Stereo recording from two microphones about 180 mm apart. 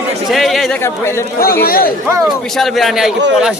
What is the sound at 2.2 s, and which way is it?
Speech, centre (ahead or behind).